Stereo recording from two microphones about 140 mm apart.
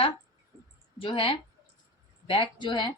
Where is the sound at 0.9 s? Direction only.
40° left (ahead or behind).